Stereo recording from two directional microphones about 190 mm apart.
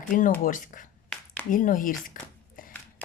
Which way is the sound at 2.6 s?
45° left (ahead or behind).